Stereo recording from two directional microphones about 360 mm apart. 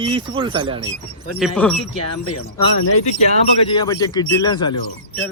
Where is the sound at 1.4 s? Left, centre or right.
Centre.